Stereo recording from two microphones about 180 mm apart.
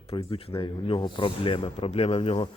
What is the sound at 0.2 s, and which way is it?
Speech, 30° left (ahead or behind).